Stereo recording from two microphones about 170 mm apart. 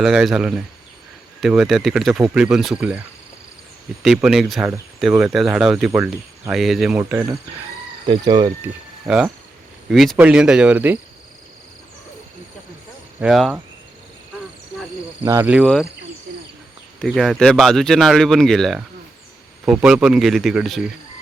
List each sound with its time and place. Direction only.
0.0 s speech: 5° right (ahead or behind)
4.0 s speech: centre (ahead or behind)
7.1 s speech: 15° right (ahead or behind)
8.0 s speech: 25° right (ahead or behind)
8.6 s speech: 5° right (ahead or behind)
13.1 s speech: centre (ahead or behind)
15.2 s speech: 20° right (ahead or behind)
15.6 s speech: 5° left (ahead or behind)
17.0 s speech: centre (ahead or behind)